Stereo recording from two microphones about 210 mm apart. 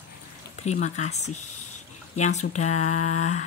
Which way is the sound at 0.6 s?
35° left (ahead or behind).